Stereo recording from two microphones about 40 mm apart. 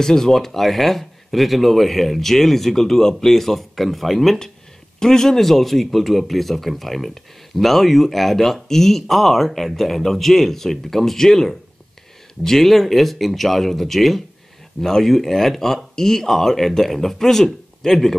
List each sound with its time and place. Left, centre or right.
0.0 s speech: centre